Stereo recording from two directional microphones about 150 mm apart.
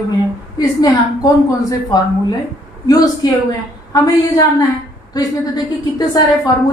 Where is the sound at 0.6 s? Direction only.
25° left (ahead or behind).